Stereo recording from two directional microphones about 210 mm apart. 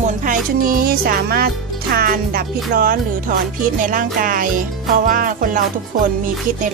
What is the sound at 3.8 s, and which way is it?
Music, 40° right (ahead or behind).